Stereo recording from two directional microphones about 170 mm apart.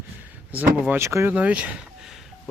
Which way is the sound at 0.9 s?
15° right (ahead or behind).